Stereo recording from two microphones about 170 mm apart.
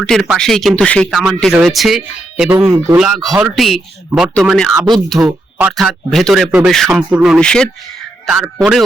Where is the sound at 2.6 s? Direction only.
15° right (ahead or behind).